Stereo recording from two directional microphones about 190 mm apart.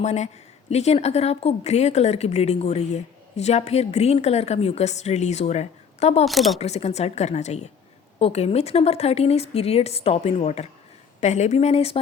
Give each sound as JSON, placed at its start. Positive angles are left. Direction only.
{"t": 0.0, "sound": "speech", "side_deg": 35}
{"t": 6.2, "sound": "speech", "side_deg": 0}
{"t": 6.6, "sound": "speech", "side_deg": 35}